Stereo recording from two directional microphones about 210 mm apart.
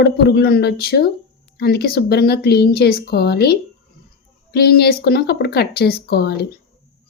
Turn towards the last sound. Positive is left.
turn(degrees=50)  # may be behind; listen again after turning